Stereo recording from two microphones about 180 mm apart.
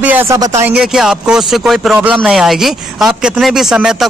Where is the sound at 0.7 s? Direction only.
5° right (ahead or behind).